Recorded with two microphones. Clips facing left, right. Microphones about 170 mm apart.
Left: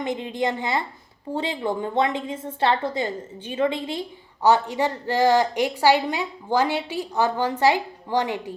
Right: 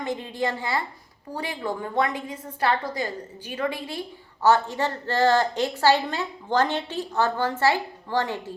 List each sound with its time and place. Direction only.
0.0 s a woman's voice: 20° left (ahead or behind)